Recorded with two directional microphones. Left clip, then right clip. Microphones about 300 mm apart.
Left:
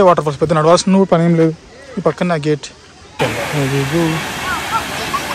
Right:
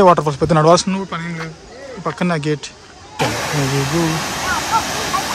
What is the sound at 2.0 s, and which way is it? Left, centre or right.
Speech, centre.